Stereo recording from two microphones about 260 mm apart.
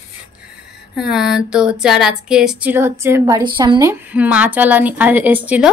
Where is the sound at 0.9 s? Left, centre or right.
Centre.